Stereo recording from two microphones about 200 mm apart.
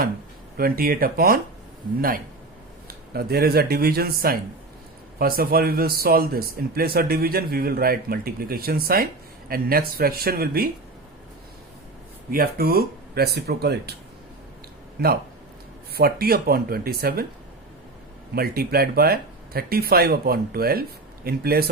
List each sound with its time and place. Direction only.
0.5 s speech: 50° right (ahead or behind)
12.3 s speech: 50° right (ahead or behind)
14.9 s speech: 50° right (ahead or behind)
18.3 s speech: 50° right (ahead or behind)